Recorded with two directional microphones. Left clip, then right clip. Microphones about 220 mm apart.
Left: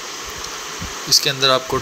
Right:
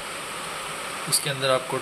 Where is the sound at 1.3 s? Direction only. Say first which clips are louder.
Left 3 dB; 20° left (ahead or behind).